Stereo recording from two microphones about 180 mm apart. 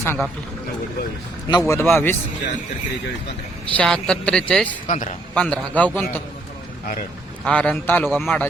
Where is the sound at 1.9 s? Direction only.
10° left (ahead or behind).